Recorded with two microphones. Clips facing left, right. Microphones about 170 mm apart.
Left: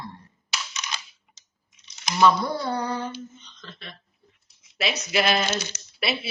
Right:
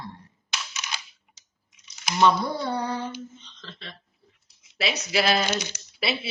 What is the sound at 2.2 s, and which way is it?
A woman's voice, 25° right (ahead or behind).